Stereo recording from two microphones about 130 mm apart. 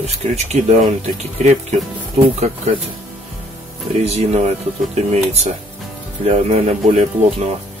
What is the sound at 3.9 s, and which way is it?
Speech, 55° right (ahead or behind).